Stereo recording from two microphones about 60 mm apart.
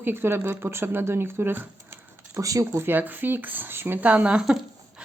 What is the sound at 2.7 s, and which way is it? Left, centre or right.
Speech, right.